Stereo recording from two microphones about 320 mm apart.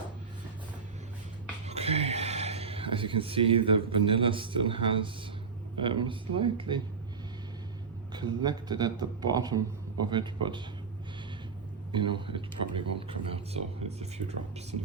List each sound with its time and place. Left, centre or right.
1.6 s a sound: centre
5.8 s a man's voice: centre
8.1 s a man's voice: centre
11.9 s a man's voice: centre